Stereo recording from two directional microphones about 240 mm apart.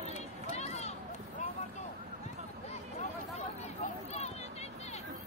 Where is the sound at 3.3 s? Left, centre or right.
Left.